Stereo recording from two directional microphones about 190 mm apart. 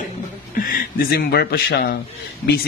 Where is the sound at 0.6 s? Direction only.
50° left (ahead or behind).